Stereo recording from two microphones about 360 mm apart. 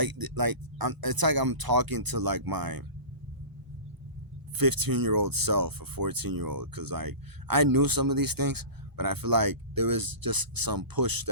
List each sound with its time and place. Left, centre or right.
0.0 s speech: right
4.5 s speech: right